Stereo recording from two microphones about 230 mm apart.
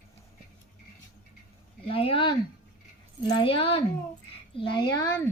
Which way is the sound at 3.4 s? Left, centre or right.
Left.